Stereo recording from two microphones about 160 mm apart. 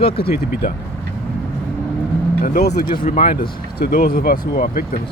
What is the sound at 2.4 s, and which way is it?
Speech, 70° left (ahead or behind).